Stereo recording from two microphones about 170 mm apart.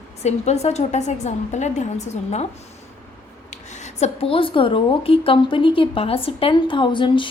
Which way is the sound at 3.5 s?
45° left (ahead or behind).